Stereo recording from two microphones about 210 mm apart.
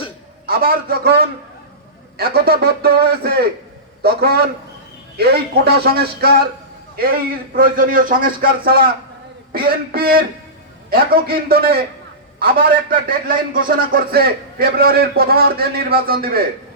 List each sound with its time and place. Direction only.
0.4 s a man's voice: 45° right (ahead or behind)